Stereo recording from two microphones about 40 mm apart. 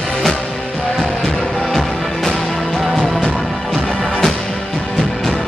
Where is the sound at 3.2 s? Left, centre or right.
Centre.